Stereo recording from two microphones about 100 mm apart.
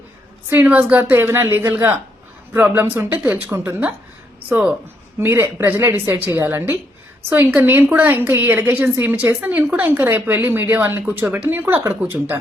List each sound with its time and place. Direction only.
0.5 s a woman's voice: 20° right (ahead or behind)
5.2 s a woman's voice: 25° right (ahead or behind)